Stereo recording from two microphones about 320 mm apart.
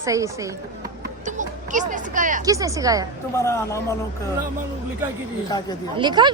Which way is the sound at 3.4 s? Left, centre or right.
Centre.